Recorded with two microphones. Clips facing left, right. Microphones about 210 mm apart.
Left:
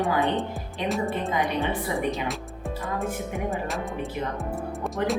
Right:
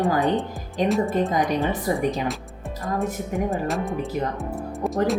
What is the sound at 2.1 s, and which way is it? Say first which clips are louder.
Speech: right 3 dB; centre (ahead or behind).